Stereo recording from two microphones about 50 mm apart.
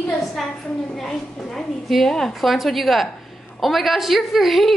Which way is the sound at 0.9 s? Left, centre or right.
Centre.